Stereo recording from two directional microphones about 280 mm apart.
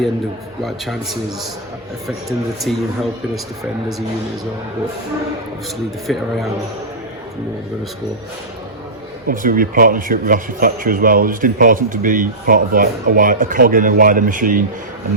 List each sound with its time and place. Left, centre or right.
0.6 s a man's voice: centre
2.6 s a man's voice: centre
6.1 s a man's voice: centre
9.2 s a man's voice: right